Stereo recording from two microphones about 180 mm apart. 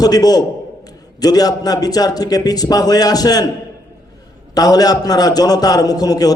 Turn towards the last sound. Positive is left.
turn(degrees=20)  # may be behind; listen again after turning